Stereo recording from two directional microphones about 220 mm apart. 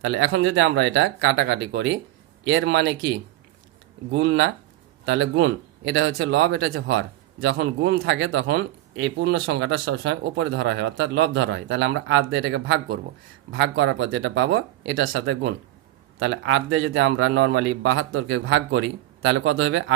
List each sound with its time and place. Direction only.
0.0 s speech: 60° right (ahead or behind)